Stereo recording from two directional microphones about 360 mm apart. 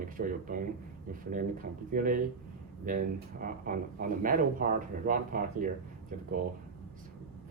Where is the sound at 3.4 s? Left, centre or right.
Right.